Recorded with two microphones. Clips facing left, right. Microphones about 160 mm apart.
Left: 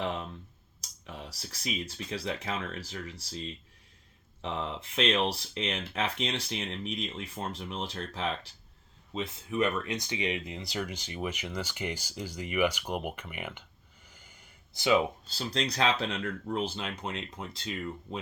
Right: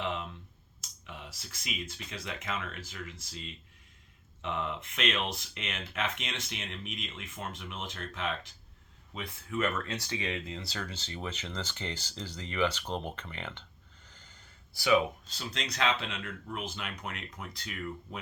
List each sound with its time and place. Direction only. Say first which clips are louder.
0.0 s clicking: left 2 dB; 40° left (ahead or behind)
0.8 s speech: left 3 dB; 35° left (ahead or behind)
9.1 s speech: left 5 dB; 25° left (ahead or behind)